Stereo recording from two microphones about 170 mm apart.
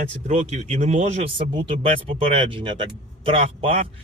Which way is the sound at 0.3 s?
45° right (ahead or behind).